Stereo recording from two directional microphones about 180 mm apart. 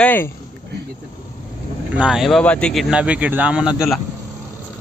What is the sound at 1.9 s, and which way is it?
Speech, 5° right (ahead or behind).